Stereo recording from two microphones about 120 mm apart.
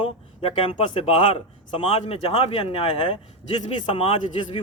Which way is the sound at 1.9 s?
60° left (ahead or behind).